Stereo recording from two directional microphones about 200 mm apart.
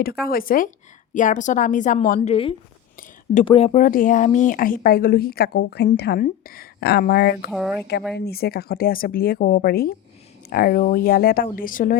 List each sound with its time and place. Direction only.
0.0 s a woman's voice: 50° left (ahead or behind)
2.3 s a woman's voice: 25° left (ahead or behind)
3.8 s a woman's voice: 45° left (ahead or behind)
7.5 s speech: centre (ahead or behind)
8.1 s a woman's voice: 50° left (ahead or behind)